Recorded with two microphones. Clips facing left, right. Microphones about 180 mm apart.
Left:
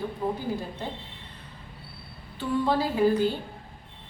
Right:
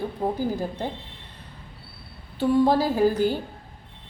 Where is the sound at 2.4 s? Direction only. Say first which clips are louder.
Right 6 dB; 40° right (ahead or behind).